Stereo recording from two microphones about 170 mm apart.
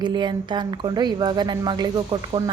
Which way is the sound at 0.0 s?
25° right (ahead or behind).